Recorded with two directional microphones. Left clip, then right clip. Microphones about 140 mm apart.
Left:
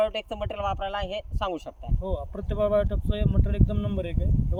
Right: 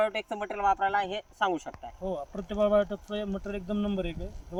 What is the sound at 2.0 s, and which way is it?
Speech, 20° left (ahead or behind).